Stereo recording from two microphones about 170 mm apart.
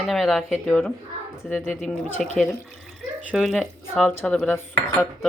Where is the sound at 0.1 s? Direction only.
Centre (ahead or behind).